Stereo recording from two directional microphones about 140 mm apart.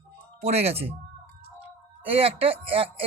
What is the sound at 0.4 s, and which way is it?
Speech, 45° right (ahead or behind).